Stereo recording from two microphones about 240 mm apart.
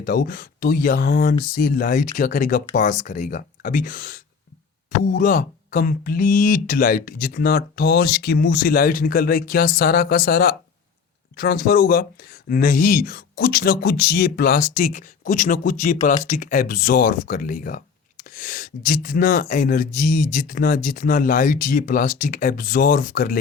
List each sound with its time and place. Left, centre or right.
0.0 s speech: left